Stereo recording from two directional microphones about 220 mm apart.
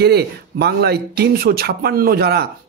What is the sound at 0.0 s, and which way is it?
Speech, 50° right (ahead or behind).